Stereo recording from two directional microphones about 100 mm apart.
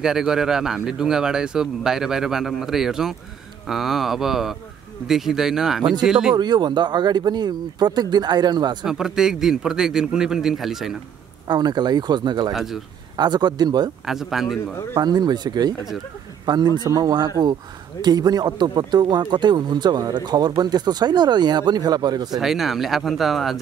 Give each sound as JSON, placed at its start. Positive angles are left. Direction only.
{"t": 0.0, "sound": "a man's voice", "side_deg": -5}
{"t": 6.3, "sound": "speech", "side_deg": -45}
{"t": 8.8, "sound": "a man's voice", "side_deg": -5}
{"t": 11.4, "sound": "speech", "side_deg": -45}
{"t": 12.5, "sound": "a man's voice", "side_deg": -5}
{"t": 13.1, "sound": "speech", "side_deg": -45}
{"t": 14.0, "sound": "a man's voice", "side_deg": -5}
{"t": 15.0, "sound": "speech", "side_deg": -45}
{"t": 22.4, "sound": "a man's voice", "side_deg": 0}